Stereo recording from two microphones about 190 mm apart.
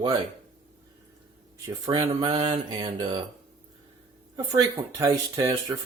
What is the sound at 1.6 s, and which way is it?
Speech, 20° right (ahead or behind).